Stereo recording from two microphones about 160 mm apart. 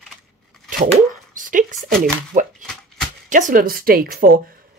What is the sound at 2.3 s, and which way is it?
Speech, 55° right (ahead or behind).